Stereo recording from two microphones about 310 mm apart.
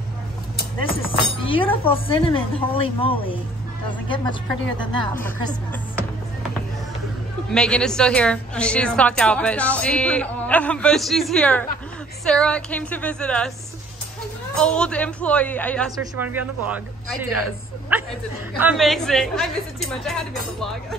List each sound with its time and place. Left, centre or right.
0.6 s music: left
1.4 s a woman's voice: centre
7.5 s a woman's voice: centre
14.6 s a woman's voice: centre
18.6 s a woman's voice: centre